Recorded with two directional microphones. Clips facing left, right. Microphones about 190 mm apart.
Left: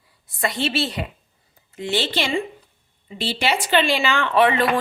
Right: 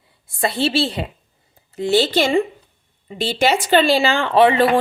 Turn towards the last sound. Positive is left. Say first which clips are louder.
# right 4 dB
turn(degrees=-30)  # may be behind; listen again after turning